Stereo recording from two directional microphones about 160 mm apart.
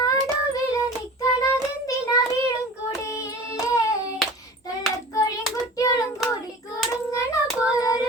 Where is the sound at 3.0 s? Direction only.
15° left (ahead or behind).